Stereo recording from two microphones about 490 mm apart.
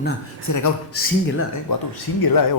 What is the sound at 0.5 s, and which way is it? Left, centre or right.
Speech, left.